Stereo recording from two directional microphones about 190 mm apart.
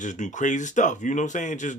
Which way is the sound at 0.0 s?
40° left (ahead or behind).